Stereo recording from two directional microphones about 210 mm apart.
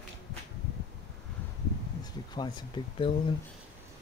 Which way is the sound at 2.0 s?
20° left (ahead or behind).